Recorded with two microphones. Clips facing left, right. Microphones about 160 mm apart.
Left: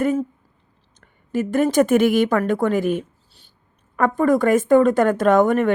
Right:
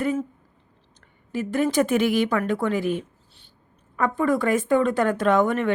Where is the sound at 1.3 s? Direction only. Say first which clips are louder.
Left 4 dB; 45° left (ahead or behind).